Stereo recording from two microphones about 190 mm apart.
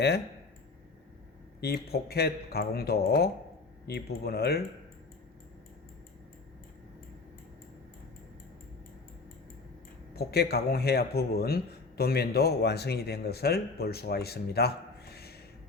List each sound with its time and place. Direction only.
1.6 s a man's voice: 55° left (ahead or behind)
10.2 s a man's voice: 55° left (ahead or behind)